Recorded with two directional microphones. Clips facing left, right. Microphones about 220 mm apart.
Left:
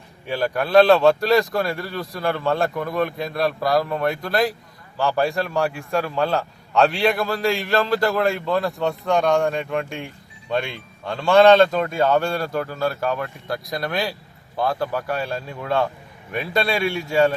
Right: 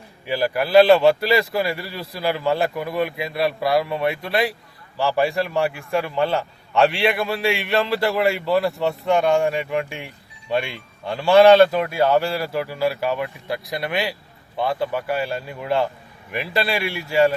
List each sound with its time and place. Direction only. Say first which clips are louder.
0.3 s a man's voice: right 1 dB; 5° right (ahead or behind)